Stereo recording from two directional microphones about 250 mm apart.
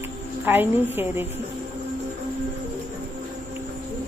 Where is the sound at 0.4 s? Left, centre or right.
Centre.